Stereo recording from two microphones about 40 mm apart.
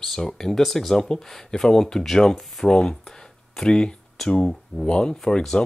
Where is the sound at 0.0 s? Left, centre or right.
Centre.